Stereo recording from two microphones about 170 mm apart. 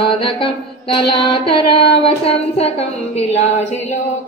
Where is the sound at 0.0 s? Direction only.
30° left (ahead or behind).